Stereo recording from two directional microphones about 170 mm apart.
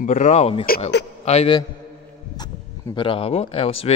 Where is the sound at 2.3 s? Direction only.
25° left (ahead or behind).